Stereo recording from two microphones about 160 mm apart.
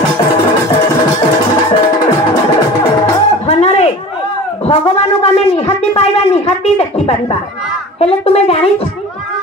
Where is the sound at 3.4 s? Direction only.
40° left (ahead or behind).